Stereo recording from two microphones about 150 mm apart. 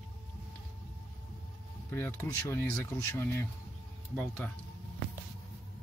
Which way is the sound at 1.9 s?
15° left (ahead or behind).